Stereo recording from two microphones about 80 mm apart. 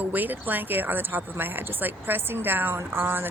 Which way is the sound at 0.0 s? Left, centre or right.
Right.